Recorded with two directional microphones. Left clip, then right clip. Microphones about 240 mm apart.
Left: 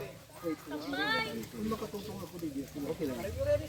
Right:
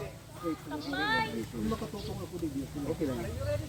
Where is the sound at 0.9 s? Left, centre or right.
Left.